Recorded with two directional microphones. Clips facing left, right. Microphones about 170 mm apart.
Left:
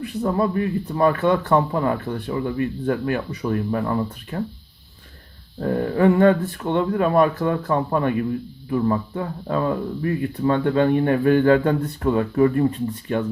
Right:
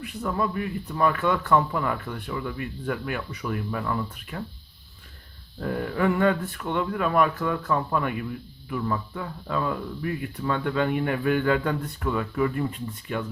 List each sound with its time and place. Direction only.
0.2 s speech: 30° left (ahead or behind)
5.5 s speech: 30° left (ahead or behind)